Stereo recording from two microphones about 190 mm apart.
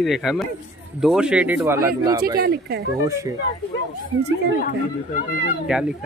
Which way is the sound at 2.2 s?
55° right (ahead or behind).